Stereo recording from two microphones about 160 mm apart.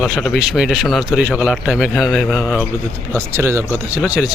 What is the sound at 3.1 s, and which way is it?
Speech, 15° right (ahead or behind).